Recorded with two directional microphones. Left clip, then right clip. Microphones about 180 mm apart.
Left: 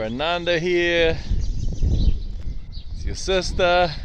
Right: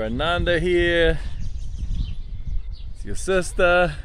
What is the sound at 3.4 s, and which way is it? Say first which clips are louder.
Speech: right 1 dB; 50° right (ahead or behind).